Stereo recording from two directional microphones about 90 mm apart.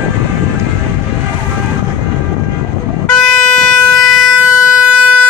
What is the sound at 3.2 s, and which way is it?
Vehicle, 5° left (ahead or behind).